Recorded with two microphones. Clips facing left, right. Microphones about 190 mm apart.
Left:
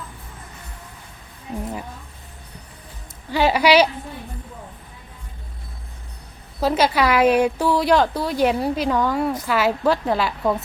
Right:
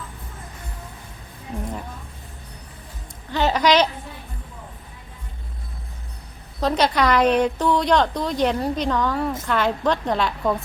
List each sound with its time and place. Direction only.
3.3 s a woman's voice: 10° left (ahead or behind)
6.6 s a woman's voice: 5° left (ahead or behind)